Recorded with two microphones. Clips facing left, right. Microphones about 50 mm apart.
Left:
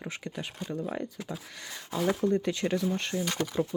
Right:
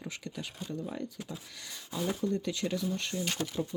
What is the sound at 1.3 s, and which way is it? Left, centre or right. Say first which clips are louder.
Speech: left 4 dB; left.